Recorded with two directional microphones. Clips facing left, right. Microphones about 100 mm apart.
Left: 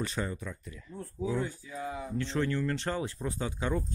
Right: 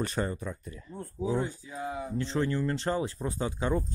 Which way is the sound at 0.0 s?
45° right (ahead or behind).